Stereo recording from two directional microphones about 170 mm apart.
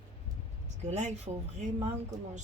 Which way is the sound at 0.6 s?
40° right (ahead or behind).